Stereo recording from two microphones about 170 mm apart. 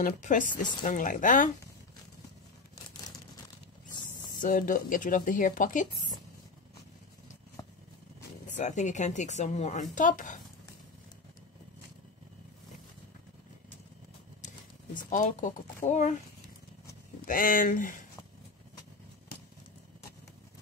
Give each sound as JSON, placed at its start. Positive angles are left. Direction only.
{"t": 0.0, "sound": "speech", "side_deg": 50}
{"t": 4.4, "sound": "speech", "side_deg": 50}
{"t": 7.6, "sound": "vehicle", "side_deg": 25}
{"t": 8.5, "sound": "speech", "side_deg": 45}
{"t": 15.0, "sound": "speech", "side_deg": 50}
{"t": 17.3, "sound": "speech", "side_deg": 55}